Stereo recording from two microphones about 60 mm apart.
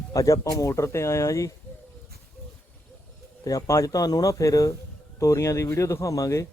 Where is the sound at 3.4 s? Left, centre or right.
Left.